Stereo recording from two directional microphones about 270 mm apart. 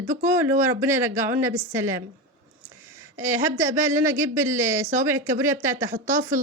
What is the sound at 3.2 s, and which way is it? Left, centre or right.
A woman's voice, centre.